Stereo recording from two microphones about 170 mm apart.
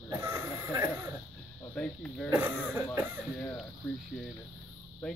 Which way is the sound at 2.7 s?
15° right (ahead or behind).